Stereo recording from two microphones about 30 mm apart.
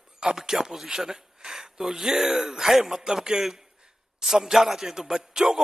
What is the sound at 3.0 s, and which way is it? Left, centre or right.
A man's voice, right.